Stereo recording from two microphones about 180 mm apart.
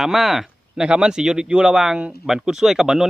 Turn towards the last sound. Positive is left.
turn(degrees=-5)  # may be behind; listen again after turning